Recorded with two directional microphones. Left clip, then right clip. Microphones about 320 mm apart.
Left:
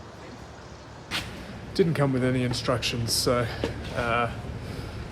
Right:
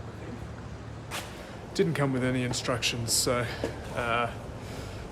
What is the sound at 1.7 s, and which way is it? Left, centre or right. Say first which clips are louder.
Speech: left 3 dB; centre.